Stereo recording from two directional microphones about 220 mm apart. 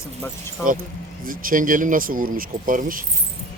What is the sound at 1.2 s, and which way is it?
Speech, 40° right (ahead or behind).